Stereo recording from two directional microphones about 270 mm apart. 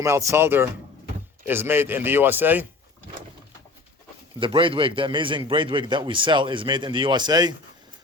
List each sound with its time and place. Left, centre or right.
0.0 s a man's voice: centre
4.4 s a man's voice: centre